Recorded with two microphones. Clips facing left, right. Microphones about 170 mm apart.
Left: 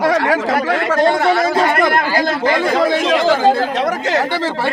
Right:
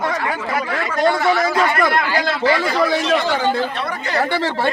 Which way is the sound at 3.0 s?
90° left.